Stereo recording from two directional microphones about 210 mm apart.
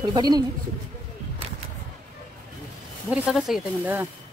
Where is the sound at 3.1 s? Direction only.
Centre (ahead or behind).